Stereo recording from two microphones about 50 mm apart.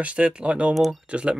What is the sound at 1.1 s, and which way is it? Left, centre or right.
Speech, right.